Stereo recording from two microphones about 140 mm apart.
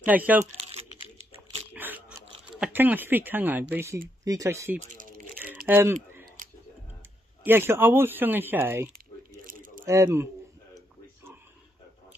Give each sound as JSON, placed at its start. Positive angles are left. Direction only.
{"t": 0.0, "sound": "speech", "side_deg": -10}
{"t": 1.7, "sound": "a sound", "side_deg": -10}
{"t": 2.6, "sound": "speech", "side_deg": -10}
{"t": 4.9, "sound": "crumpling", "side_deg": -75}
{"t": 5.7, "sound": "speech", "side_deg": -15}
{"t": 6.4, "sound": "tick-tock", "side_deg": -80}
{"t": 7.4, "sound": "speech", "side_deg": -15}
{"t": 9.5, "sound": "a sound", "side_deg": -75}
{"t": 9.8, "sound": "speech", "side_deg": -20}